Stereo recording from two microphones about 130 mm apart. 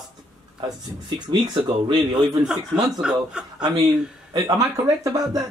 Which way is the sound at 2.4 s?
5° right (ahead or behind).